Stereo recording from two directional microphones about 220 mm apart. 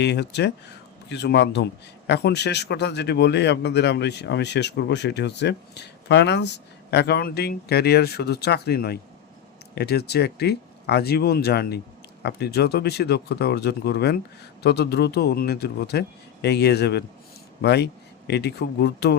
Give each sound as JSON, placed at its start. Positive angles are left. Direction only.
{"t": 0.0, "sound": "a man's voice", "side_deg": 50}